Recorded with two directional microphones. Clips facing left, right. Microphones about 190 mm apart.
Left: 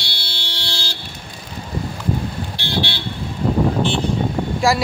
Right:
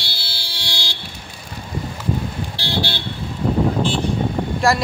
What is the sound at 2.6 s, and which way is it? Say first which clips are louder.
Vehicle: right 1 dB; 35° right (ahead or behind).